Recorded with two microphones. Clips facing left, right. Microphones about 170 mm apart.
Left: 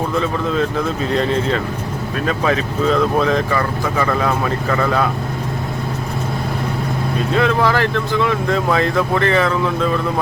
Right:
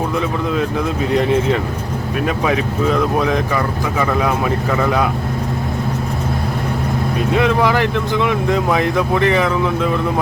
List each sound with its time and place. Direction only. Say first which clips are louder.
0.2 s speech: left 3 dB; 10° right (ahead or behind)
7.3 s speech: right 1 dB; 15° right (ahead or behind)